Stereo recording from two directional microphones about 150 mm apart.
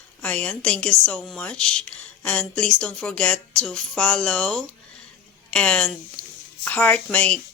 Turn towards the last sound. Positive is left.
turn(degrees=10)  # may be behind; listen again after turning